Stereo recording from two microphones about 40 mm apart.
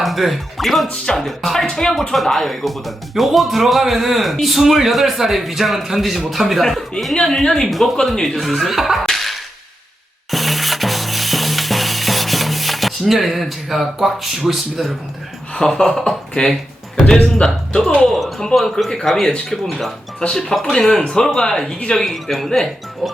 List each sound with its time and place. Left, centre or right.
0.0 s speech: centre
1.0 s speech: centre
7.4 s speech: centre
7.7 s speech: centre
9.0 s a sound: centre
10.3 s music: centre
15.5 s speech: centre
18.0 s speech: centre
20.3 s speech: centre